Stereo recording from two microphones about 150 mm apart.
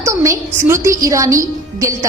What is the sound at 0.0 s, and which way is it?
A woman's voice, 20° right (ahead or behind).